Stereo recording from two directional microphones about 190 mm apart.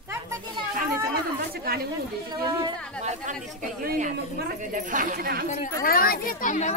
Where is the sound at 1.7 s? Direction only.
55° right (ahead or behind).